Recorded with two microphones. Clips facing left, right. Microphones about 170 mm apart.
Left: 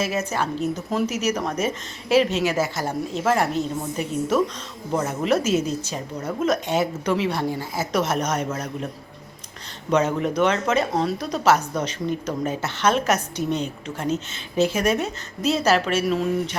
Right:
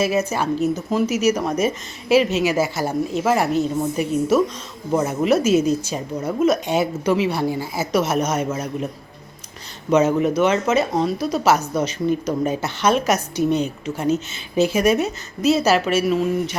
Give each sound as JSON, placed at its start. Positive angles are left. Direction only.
{"t": 0.0, "sound": "a woman's voice", "side_deg": -10}
{"t": 9.9, "sound": "a woman's voice", "side_deg": -5}